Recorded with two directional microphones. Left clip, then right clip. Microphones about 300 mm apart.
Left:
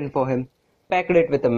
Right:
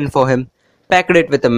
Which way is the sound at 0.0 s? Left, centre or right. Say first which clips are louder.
Right 9 dB; right.